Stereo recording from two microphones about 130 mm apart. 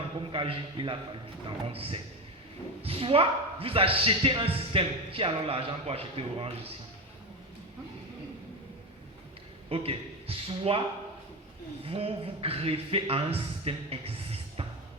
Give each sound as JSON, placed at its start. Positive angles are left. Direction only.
{"t": 0.3, "sound": "a man's voice", "side_deg": -40}
{"t": 9.6, "sound": "speech", "side_deg": -45}
{"t": 11.9, "sound": "speech", "side_deg": -45}